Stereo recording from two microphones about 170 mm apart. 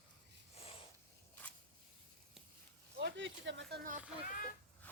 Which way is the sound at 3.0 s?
90° right.